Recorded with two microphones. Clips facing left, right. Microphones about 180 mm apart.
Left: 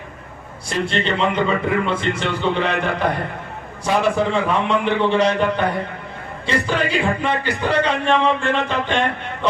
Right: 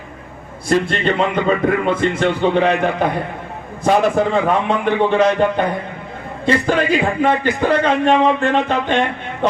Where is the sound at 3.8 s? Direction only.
50° right (ahead or behind).